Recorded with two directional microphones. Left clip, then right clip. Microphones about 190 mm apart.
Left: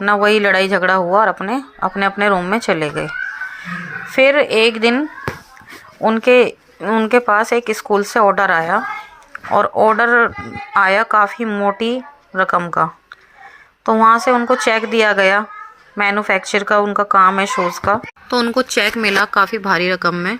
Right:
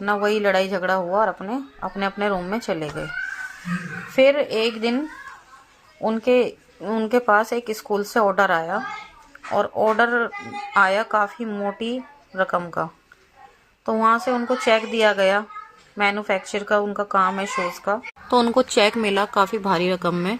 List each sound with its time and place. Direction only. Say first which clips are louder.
0.0 s speech: left 7 dB; 25° left (ahead or behind)
4.1 s speech: left 5 dB; 20° left (ahead or behind)
18.8 s speech: left 6 dB; 10° left (ahead or behind)